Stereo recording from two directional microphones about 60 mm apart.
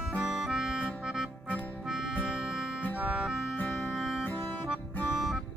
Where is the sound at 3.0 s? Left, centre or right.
Centre.